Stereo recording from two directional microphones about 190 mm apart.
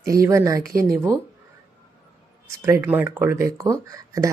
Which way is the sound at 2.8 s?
10° right (ahead or behind).